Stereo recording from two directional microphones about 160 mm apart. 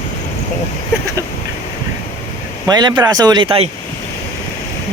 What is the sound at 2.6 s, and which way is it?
Speech, 25° right (ahead or behind).